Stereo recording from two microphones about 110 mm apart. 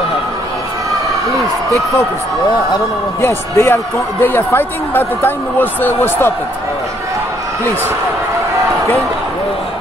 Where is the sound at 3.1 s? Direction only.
25° left (ahead or behind).